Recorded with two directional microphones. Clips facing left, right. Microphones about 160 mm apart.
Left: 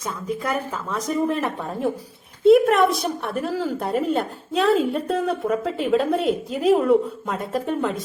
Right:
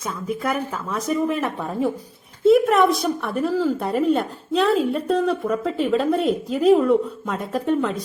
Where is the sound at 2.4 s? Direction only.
Centre (ahead or behind).